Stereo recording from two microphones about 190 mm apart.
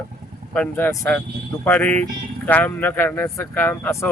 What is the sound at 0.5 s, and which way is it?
A man's voice, 10° left (ahead or behind).